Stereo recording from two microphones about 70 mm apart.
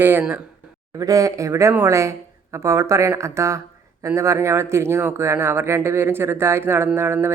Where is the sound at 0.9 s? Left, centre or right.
Right.